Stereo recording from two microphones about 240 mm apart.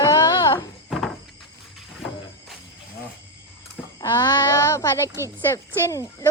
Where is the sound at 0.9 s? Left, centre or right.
Centre.